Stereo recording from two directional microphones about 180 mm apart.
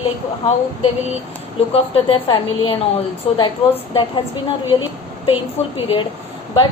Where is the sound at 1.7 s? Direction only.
30° left (ahead or behind).